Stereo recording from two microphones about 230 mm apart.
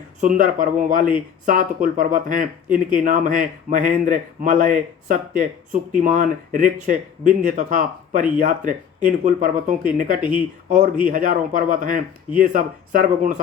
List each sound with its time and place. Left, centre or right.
0.2 s speech: right